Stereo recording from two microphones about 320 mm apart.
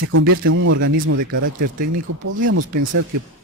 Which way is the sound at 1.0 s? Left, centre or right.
Right.